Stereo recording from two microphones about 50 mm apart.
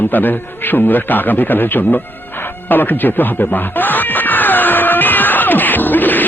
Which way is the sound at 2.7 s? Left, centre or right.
Left.